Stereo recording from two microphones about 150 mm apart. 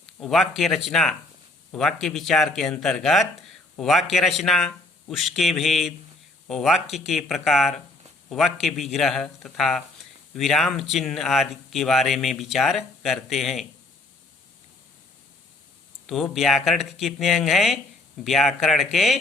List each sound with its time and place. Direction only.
0.2 s a man's voice: centre (ahead or behind)
16.0 s speech: centre (ahead or behind)